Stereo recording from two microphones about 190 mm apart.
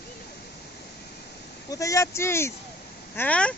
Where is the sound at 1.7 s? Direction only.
15° left (ahead or behind).